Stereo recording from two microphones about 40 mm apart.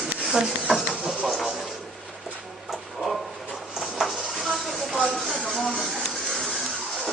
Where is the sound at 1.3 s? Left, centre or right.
Centre.